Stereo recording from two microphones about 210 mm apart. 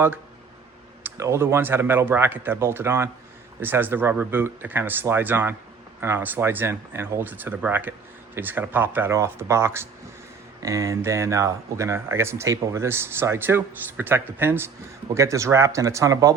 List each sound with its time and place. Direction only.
1.0 s speech: 10° right (ahead or behind)